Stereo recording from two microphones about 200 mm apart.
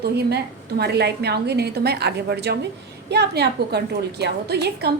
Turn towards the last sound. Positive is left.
turn(degrees=-55)  # may be behind; listen again after turning